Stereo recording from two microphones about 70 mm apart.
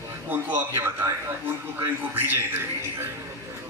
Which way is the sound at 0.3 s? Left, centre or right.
Right.